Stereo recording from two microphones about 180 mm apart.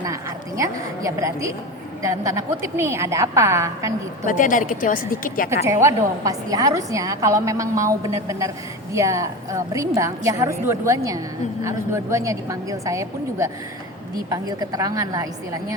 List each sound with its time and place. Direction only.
0.0 s a woman's voice: 20° right (ahead or behind)
4.3 s a woman's voice: 45° left (ahead or behind)
5.6 s a woman's voice: 15° right (ahead or behind)